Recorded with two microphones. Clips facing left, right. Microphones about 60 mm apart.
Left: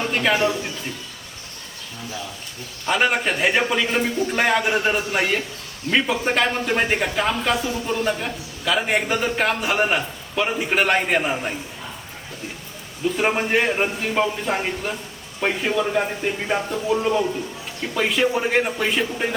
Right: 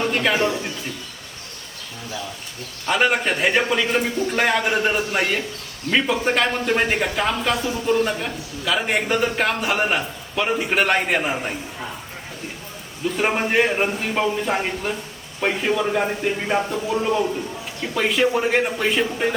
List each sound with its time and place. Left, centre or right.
0.0 s a sound: centre
2.8 s speech: centre
13.1 s speech: centre